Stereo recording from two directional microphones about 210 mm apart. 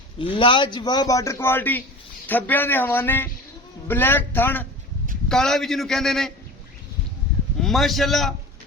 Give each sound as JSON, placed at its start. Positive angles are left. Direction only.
{"t": 0.2, "sound": "a man's voice", "side_deg": 25}
{"t": 7.6, "sound": "a man's voice", "side_deg": 0}